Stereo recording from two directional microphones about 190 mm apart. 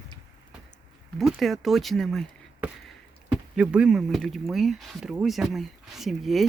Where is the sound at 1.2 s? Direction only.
Centre (ahead or behind).